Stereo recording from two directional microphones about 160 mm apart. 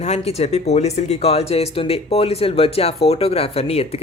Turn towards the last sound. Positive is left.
turn(degrees=40)  # may be behind; listen again after turning